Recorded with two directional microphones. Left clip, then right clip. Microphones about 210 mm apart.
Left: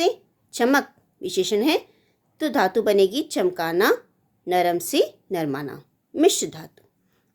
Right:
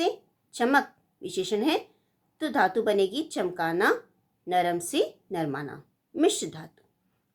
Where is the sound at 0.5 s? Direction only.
40° left (ahead or behind).